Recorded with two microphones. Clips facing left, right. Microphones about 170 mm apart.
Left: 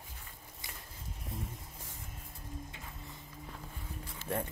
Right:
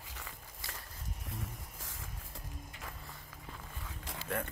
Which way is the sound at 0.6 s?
15° left (ahead or behind).